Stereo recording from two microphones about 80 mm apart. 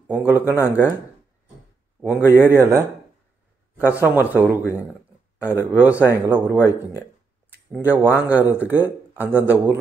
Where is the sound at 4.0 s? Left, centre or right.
Right.